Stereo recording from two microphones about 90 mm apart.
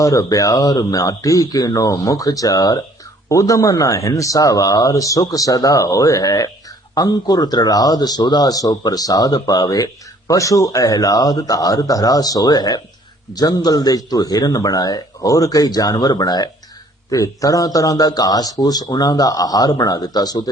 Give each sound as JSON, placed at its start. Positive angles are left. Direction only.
{"t": 0.0, "sound": "speech", "side_deg": 40}